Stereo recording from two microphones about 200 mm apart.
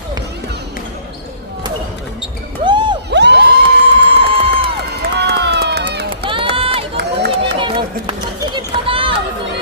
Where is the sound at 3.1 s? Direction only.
60° right (ahead or behind).